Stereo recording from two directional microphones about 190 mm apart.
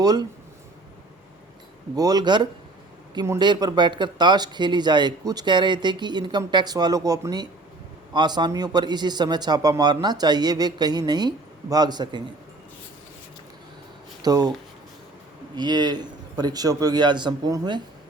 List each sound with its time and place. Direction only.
0.0 s speech: 20° right (ahead or behind)
2.0 s speech: 20° right (ahead or behind)
14.2 s speech: 20° right (ahead or behind)
15.5 s speech: 20° right (ahead or behind)